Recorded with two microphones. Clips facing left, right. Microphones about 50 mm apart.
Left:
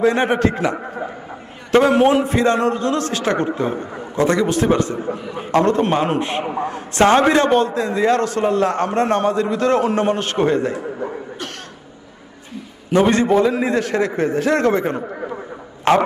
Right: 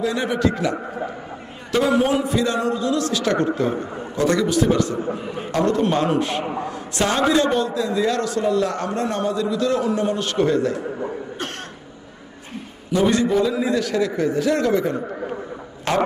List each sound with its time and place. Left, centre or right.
0.0 s a man's voice: left
1.7 s a man's voice: left
6.6 s a man's voice: left
12.9 s a man's voice: left